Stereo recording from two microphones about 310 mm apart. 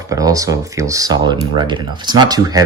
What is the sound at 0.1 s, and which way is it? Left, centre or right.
Speech, centre.